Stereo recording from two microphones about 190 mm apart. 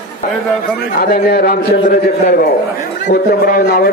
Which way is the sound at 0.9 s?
50° left (ahead or behind).